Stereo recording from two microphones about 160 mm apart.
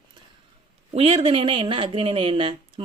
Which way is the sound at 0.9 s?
35° right (ahead or behind).